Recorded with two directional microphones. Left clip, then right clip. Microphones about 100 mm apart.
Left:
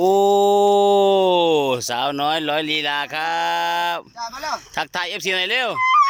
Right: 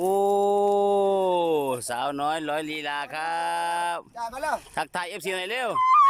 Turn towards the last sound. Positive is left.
turn(degrees=-15)  # may be behind; listen again after turning